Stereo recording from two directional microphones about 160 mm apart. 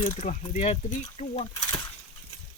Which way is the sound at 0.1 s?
45° left (ahead or behind).